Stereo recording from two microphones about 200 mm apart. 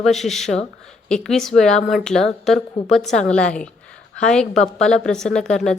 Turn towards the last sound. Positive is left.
turn(degrees=5)  # may be behind; listen again after turning